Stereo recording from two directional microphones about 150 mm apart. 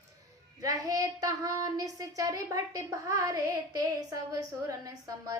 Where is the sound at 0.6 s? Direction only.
25° right (ahead or behind).